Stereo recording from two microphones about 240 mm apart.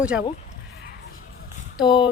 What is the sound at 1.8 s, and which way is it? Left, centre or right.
Speech, centre.